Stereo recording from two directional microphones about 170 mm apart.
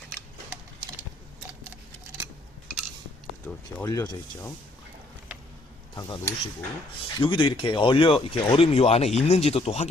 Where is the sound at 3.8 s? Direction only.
20° left (ahead or behind).